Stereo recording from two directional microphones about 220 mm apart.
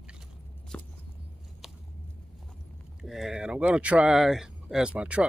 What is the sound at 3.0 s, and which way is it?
Speech, centre (ahead or behind).